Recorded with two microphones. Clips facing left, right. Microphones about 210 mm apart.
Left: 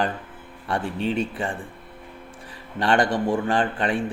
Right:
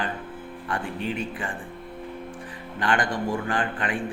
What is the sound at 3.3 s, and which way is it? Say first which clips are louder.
Speech: left 5 dB; 30° left (ahead or behind).